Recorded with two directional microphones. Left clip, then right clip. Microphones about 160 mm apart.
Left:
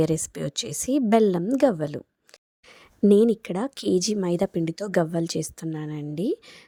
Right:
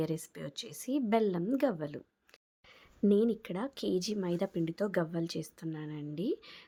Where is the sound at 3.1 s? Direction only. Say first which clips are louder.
Left 11 dB; 60° left (ahead or behind).